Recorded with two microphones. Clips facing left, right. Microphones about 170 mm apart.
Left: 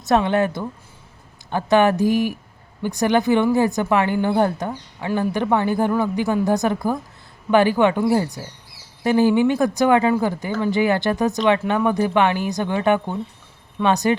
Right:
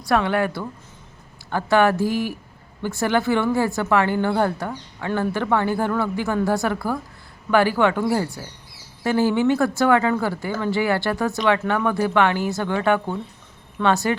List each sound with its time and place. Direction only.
0.0 s speech: 20° left (ahead or behind)